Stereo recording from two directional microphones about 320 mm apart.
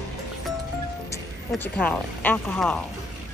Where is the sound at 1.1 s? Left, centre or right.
Centre.